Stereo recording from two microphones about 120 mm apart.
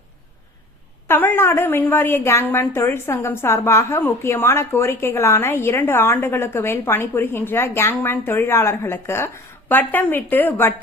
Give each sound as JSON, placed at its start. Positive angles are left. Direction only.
{"t": 1.0, "sound": "a woman's voice", "side_deg": 15}